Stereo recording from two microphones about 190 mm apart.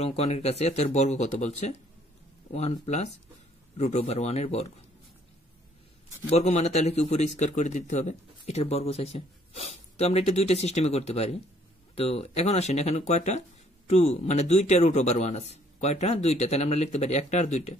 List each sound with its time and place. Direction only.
0.0 s a man's voice: 35° left (ahead or behind)
6.3 s a man's voice: 35° left (ahead or behind)